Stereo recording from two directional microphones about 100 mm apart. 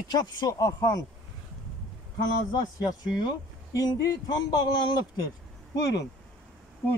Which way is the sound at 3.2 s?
40° left (ahead or behind).